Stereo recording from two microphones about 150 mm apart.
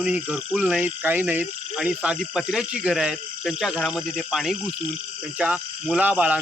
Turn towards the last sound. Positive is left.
turn(degrees=-10)  # may be behind; listen again after turning